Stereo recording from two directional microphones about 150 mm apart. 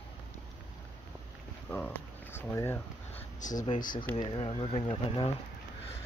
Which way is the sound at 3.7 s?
65° left (ahead or behind).